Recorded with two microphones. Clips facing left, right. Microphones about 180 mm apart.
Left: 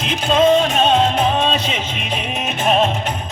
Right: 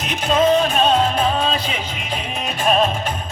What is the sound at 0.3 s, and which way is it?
Music, 25° left (ahead or behind).